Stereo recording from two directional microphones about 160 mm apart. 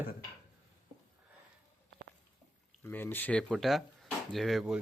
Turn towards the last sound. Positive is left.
turn(degrees=0)  # may be behind; listen again after turning